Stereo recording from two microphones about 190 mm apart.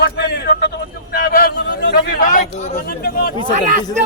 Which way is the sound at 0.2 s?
60° left (ahead or behind).